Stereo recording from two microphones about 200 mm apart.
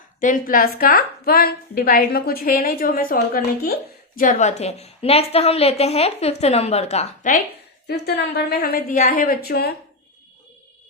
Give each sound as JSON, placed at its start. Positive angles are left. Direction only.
{"t": 0.2, "sound": "a woman's voice", "side_deg": 45}
{"t": 7.9, "sound": "a woman's voice", "side_deg": 55}